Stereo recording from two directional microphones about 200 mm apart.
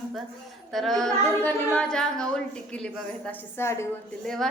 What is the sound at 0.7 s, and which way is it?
A woman's voice, centre (ahead or behind).